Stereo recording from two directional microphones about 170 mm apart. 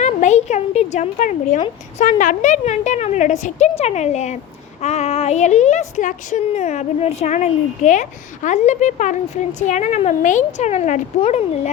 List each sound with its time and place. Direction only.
0.0 s a woman's voice: 45° left (ahead or behind)